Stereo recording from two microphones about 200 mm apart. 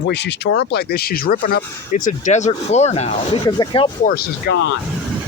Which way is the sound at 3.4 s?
20° left (ahead or behind).